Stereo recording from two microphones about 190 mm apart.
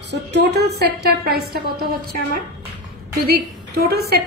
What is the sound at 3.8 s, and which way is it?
Speech, 55° right (ahead or behind).